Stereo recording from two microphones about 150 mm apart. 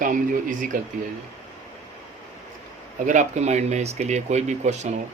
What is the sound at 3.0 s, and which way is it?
Speech, 55° right (ahead or behind).